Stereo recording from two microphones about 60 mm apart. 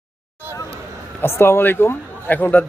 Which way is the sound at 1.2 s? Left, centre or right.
Left.